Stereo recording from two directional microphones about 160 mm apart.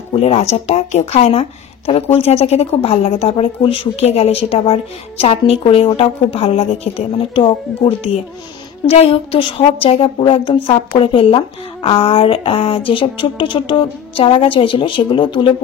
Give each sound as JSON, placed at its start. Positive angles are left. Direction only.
{"t": 0.2, "sound": "a woman's voice", "side_deg": 45}